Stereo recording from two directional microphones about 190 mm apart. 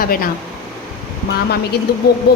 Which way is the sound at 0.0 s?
50° left (ahead or behind).